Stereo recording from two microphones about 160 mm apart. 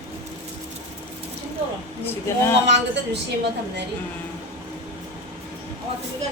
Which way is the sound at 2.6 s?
90° right.